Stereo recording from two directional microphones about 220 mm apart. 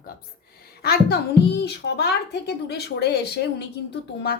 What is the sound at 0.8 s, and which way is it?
A woman's voice, 45° left (ahead or behind).